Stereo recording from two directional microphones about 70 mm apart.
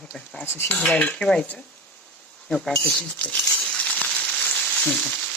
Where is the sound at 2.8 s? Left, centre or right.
Centre.